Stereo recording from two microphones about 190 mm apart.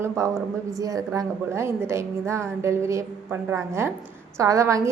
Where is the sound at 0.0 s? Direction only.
15° right (ahead or behind).